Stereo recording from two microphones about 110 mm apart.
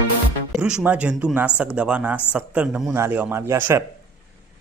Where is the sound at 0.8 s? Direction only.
15° right (ahead or behind).